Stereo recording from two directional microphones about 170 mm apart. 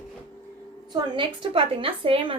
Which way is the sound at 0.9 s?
30° right (ahead or behind).